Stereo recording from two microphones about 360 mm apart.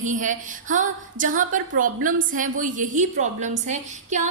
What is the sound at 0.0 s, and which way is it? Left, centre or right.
A woman's voice, right.